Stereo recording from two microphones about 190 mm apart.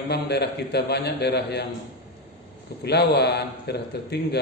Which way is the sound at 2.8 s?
60° left (ahead or behind).